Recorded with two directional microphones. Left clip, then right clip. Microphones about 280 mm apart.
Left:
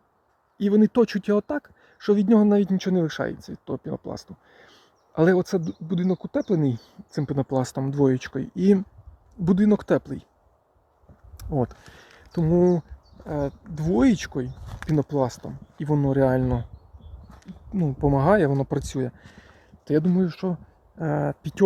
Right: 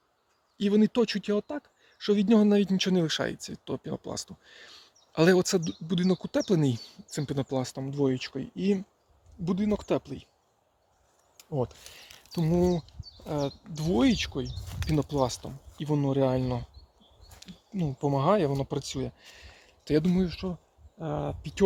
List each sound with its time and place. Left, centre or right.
0.5 s speech: centre
11.3 s a sound: left
12.2 s speech: centre
13.2 s speech: centre
17.7 s speech: centre
19.8 s speech: centre
20.2 s speech: centre